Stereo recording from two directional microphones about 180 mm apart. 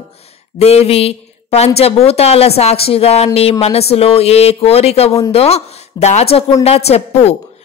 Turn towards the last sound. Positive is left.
turn(degrees=35)  # may be behind; listen again after turning